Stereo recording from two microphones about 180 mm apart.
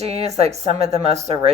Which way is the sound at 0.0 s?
35° right (ahead or behind).